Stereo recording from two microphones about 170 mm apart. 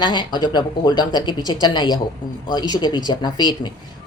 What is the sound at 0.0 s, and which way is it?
Speech, 25° left (ahead or behind).